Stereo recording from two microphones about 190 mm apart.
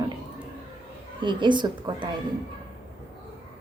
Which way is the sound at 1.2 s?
25° right (ahead or behind).